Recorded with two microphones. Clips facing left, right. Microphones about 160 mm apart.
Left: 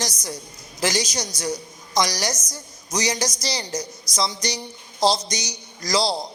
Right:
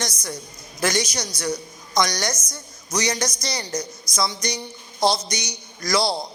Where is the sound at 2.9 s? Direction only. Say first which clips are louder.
Even; 20° left (ahead or behind).